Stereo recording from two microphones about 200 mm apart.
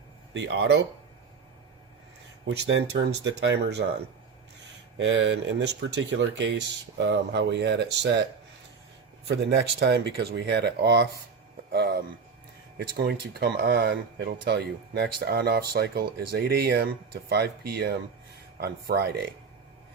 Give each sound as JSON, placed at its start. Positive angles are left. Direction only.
{"t": 0.3, "sound": "speech", "side_deg": -65}
{"t": 2.5, "sound": "speech", "side_deg": -65}
{"t": 4.9, "sound": "speech", "side_deg": -65}
{"t": 9.2, "sound": "speech", "side_deg": -55}
{"t": 11.7, "sound": "a sound", "side_deg": -55}
{"t": 13.0, "sound": "speech", "side_deg": -55}